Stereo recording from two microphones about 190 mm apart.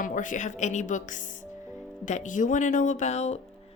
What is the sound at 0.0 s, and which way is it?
Speech, 45° left (ahead or behind).